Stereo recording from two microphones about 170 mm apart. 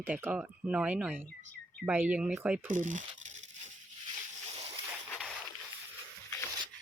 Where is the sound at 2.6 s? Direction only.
50° right (ahead or behind).